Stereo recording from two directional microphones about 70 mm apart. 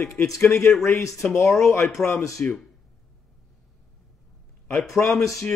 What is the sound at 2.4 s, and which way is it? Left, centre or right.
Speech, left.